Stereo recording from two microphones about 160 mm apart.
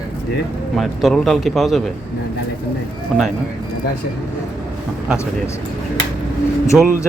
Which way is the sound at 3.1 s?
5° left (ahead or behind).